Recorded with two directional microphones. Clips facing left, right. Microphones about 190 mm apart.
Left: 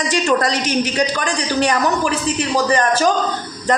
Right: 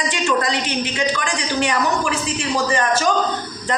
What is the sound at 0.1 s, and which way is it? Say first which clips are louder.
A man's voice: left 4 dB; 40° left (ahead or behind).